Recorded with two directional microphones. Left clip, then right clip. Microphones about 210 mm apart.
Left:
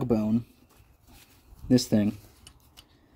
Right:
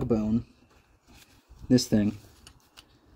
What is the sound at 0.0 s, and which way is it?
Speech, 20° left (ahead or behind).